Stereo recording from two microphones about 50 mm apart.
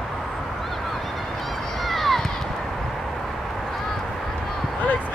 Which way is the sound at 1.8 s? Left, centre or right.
Centre.